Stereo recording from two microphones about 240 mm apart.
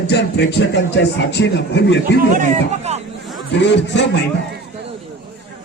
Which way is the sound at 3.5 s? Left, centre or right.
Left.